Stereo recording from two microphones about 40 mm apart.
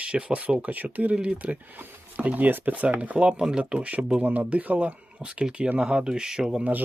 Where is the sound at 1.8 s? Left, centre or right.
Right.